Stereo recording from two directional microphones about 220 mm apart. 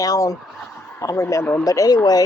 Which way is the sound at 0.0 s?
15° left (ahead or behind).